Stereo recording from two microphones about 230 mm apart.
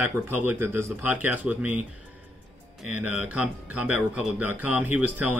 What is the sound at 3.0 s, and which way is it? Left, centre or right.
Speech, centre.